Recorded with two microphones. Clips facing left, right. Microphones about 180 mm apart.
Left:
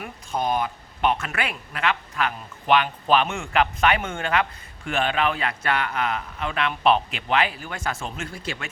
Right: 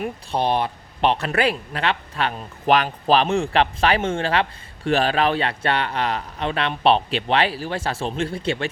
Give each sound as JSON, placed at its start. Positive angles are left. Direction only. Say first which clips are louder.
{"t": 0.0, "sound": "speech", "louder": "right 4 dB", "side_deg": -30}